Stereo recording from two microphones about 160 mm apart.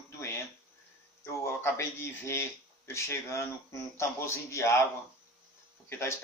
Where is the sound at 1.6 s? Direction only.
15° left (ahead or behind).